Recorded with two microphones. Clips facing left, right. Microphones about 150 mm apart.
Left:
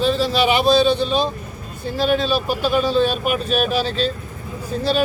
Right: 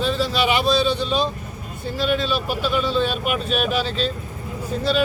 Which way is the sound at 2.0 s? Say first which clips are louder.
Left 3 dB; 40° left (ahead or behind).